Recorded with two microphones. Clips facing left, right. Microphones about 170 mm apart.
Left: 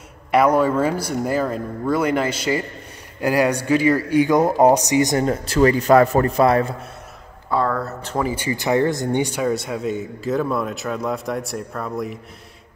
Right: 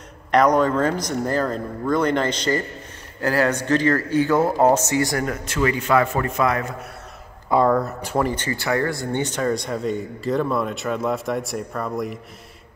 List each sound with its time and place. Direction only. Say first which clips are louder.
0.3 s speech: left 1 dB; 10° left (ahead or behind); by 6.7 s 30° left (ahead or behind)
7.4 s speech: right 3 dB; 15° right (ahead or behind)
8.2 s speech: right 1 dB; 5° left (ahead or behind)
8.5 s speech: left 4 dB; 20° left (ahead or behind); by 12.2 s centre (ahead or behind)